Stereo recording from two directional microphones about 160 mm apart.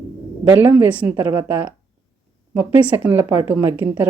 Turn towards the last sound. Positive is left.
turn(degrees=-15)  # may be behind; listen again after turning